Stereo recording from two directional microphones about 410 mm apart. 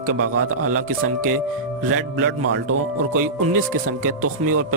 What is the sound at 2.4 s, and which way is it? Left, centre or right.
Speech, right.